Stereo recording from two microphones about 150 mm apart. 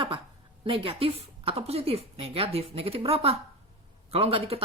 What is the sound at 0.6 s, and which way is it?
A woman's voice, 35° right (ahead or behind).